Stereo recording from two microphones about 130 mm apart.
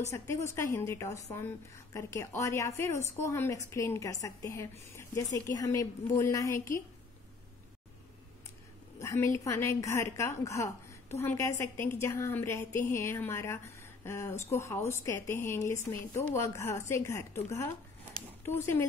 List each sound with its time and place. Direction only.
0.1 s speech: 20° left (ahead or behind)
9.0 s speech: 20° left (ahead or behind)